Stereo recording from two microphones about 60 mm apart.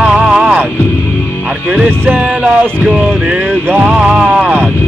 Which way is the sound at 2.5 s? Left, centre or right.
Centre.